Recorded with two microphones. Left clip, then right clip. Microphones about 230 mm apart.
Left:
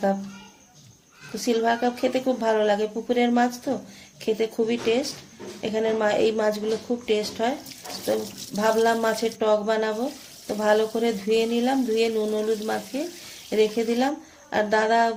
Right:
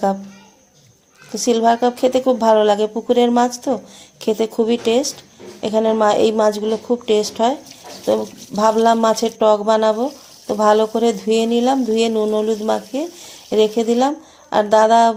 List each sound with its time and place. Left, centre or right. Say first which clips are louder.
1.4 s a woman's voice: right 8 dB; right